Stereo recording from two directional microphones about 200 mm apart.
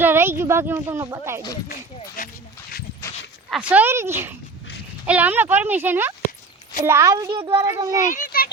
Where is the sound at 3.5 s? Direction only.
5° right (ahead or behind).